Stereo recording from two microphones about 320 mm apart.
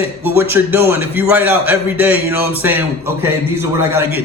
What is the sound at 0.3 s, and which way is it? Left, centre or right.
A man's voice, centre.